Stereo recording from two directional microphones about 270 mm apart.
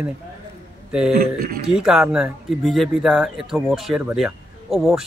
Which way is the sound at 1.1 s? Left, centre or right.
Right.